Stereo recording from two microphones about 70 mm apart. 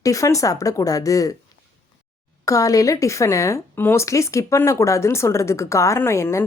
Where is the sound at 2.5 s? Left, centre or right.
Left.